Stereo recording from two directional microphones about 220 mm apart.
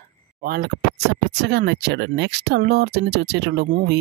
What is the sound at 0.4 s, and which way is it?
Speech, 45° right (ahead or behind).